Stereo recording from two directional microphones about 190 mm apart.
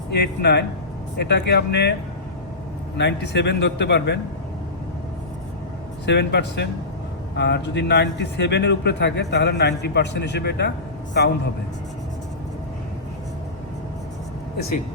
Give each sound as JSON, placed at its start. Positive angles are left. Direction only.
{"t": 0.1, "sound": "a man's voice", "side_deg": 60}
{"t": 3.0, "sound": "a man's voice", "side_deg": 65}
{"t": 6.1, "sound": "a man's voice", "side_deg": 60}